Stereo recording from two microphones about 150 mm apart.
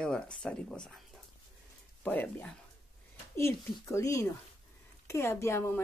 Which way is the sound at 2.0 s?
10° left (ahead or behind).